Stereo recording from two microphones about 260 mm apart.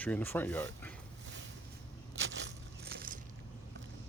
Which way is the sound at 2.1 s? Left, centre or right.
Right.